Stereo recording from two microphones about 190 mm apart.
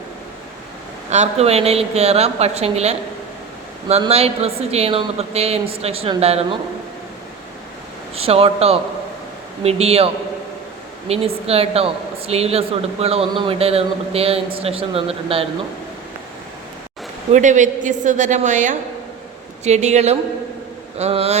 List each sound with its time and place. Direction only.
1.1 s a woman's voice: 35° right (ahead or behind)
8.1 s a woman's voice: 30° right (ahead or behind)
11.1 s a woman's voice: 30° right (ahead or behind)
17.3 s a woman's voice: 40° right (ahead or behind)